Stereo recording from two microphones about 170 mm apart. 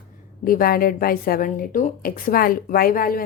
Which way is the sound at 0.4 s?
60° left (ahead or behind).